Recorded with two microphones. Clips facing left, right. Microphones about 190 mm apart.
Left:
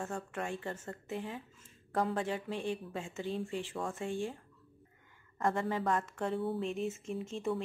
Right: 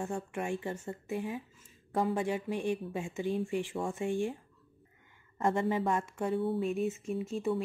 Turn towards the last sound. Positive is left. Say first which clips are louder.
# right 3 dB
turn(degrees=-5)  # may be behind; listen again after turning